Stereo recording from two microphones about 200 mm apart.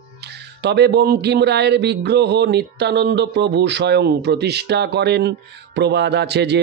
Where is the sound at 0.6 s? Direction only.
55° right (ahead or behind).